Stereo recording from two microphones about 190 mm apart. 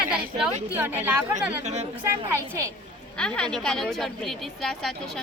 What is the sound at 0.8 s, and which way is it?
Speech, 10° right (ahead or behind).